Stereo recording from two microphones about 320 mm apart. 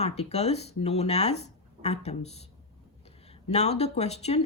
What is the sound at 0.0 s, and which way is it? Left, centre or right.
A woman's voice, centre.